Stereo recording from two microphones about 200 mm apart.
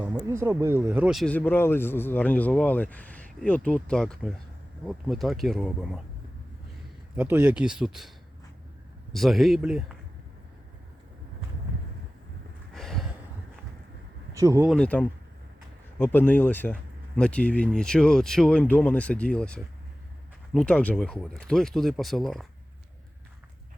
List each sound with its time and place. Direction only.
0.0 s speech: 10° right (ahead or behind)
7.2 s speech: 10° right (ahead or behind)
9.1 s speech: centre (ahead or behind)
12.7 s a sound: centre (ahead or behind)
14.3 s speech: 15° right (ahead or behind)
14.7 s speech: 5° left (ahead or behind)